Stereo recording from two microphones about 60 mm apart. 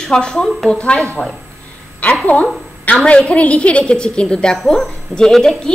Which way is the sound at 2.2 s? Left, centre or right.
Left.